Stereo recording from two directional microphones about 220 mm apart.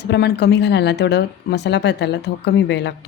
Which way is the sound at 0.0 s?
50° left (ahead or behind).